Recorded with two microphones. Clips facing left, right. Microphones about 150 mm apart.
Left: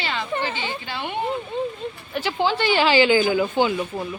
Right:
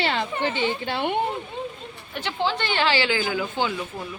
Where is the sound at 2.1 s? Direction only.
5° left (ahead or behind); by 3.8 s 20° left (ahead or behind).